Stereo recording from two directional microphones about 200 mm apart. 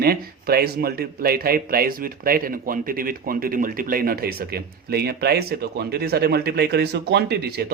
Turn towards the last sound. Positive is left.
turn(degrees=-50)  # may be behind; listen again after turning